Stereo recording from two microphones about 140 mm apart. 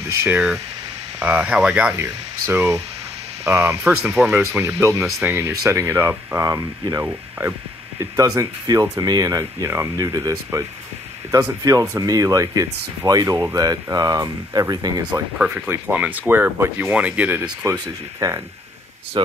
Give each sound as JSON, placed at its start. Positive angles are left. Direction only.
{"t": 0.2, "sound": "speech", "side_deg": -10}
{"t": 2.0, "sound": "speech", "side_deg": -20}
{"t": 11.6, "sound": "speech", "side_deg": -25}
{"t": 15.3, "sound": "speech", "side_deg": -5}
{"t": 18.2, "sound": "speech", "side_deg": -25}